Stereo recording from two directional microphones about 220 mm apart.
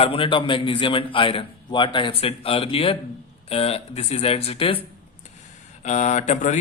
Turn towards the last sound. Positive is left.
turn(degrees=35)  # may be behind; listen again after turning